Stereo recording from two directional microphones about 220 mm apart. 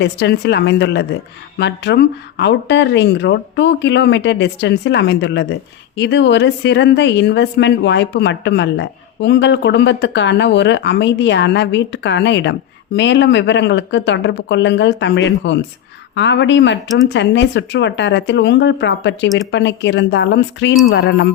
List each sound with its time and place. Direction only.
0.0 s a woman's voice: 50° left (ahead or behind)